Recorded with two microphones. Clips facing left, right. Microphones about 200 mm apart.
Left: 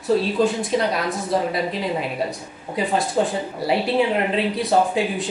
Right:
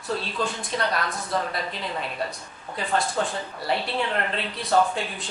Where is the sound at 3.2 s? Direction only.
30° left (ahead or behind).